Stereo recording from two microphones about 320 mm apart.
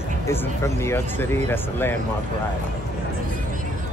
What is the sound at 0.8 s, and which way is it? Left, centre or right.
Speech, centre.